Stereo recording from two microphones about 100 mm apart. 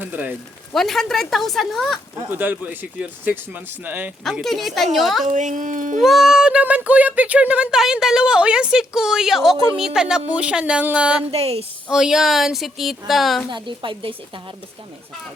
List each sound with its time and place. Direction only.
0.0 s speech: 15° right (ahead or behind)
0.7 s a woman's voice: 5° left (ahead or behind)
2.3 s speech: 20° right (ahead or behind)
4.4 s a woman's voice: centre (ahead or behind)
11.3 s speech: 85° right
11.9 s a woman's voice: 5° right (ahead or behind)
13.5 s a woman's voice: 55° right (ahead or behind)